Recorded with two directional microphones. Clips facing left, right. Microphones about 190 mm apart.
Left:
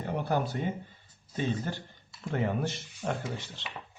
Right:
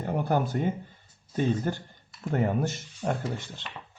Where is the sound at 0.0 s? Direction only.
45° right (ahead or behind).